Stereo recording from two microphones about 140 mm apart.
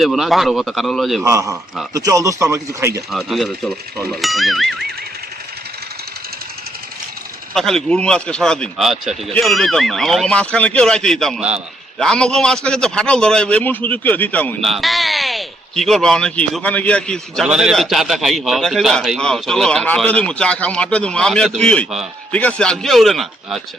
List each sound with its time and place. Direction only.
0.0 s a man's voice: centre (ahead or behind)
1.2 s speech: 20° right (ahead or behind)
3.1 s a man's voice: centre (ahead or behind)
7.5 s a man's voice: 5° left (ahead or behind)
11.3 s a man's voice: 10° right (ahead or behind)
11.9 s a man's voice: 5° left (ahead or behind)
14.6 s speech: centre (ahead or behind)
17.4 s a man's voice: 5° right (ahead or behind)